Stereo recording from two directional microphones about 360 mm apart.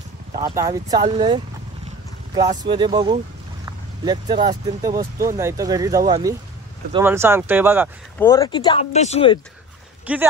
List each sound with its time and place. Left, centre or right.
0.3 s speech: centre
8.2 s speech: centre
10.1 s speech: centre